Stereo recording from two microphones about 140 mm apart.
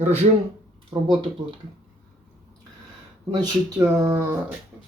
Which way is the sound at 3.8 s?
25° right (ahead or behind).